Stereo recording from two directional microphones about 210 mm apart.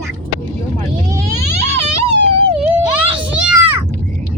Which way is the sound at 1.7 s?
30° right (ahead or behind).